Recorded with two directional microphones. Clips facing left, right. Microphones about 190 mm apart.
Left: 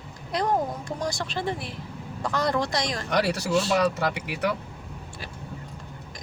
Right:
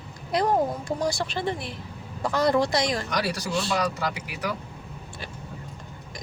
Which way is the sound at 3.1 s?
55° left (ahead or behind).